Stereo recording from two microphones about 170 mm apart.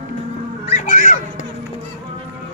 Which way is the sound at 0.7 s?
45° left (ahead or behind).